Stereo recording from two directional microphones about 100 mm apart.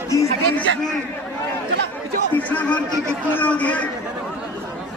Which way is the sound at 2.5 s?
15° left (ahead or behind).